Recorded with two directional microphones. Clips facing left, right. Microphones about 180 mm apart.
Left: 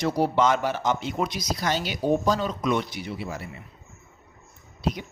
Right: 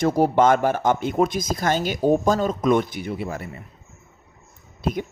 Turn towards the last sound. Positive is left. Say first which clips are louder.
# right 3 dB
turn(degrees=-50)  # may be behind; listen again after turning